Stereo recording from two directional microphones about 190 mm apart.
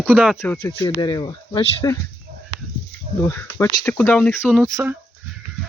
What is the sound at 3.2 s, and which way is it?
Speech, 10° left (ahead or behind).